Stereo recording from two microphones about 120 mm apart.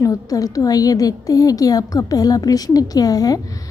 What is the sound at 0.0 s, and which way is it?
A woman's voice, 30° left (ahead or behind).